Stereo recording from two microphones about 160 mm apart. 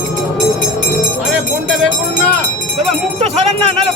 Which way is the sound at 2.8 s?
40° right (ahead or behind).